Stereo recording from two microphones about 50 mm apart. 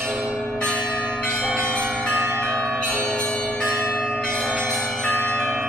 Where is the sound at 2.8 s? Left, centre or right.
Left.